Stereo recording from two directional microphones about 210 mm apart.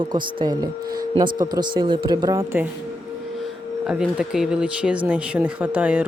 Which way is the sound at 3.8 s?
5° right (ahead or behind).